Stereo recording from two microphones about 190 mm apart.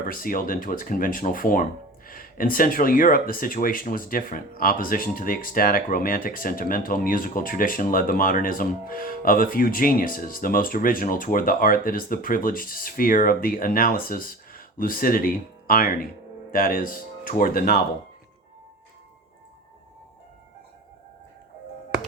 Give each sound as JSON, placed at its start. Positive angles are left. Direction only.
{"t": 0.0, "sound": "speech", "side_deg": 50}